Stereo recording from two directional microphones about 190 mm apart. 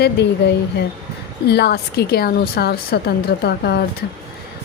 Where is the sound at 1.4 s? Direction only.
60° left (ahead or behind).